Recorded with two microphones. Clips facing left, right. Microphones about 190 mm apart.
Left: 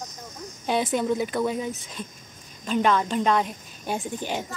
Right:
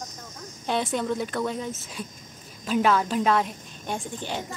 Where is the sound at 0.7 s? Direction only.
5° left (ahead or behind).